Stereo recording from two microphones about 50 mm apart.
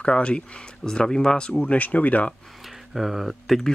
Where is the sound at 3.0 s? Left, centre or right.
Centre.